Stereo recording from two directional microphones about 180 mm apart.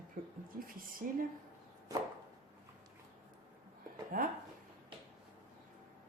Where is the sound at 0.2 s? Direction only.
50° right (ahead or behind).